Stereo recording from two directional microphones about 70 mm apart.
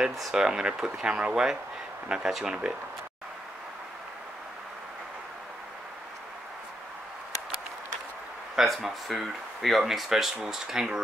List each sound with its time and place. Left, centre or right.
0.2 s speech: centre
8.5 s speech: centre